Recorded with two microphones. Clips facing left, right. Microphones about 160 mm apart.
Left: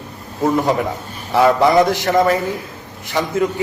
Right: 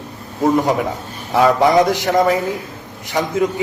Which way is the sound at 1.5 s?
15° right (ahead or behind).